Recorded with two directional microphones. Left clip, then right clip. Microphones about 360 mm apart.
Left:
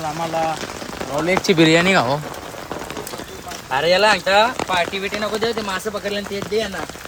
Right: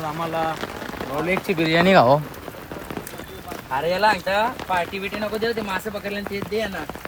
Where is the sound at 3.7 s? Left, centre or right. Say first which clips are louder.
Left 5 dB; left.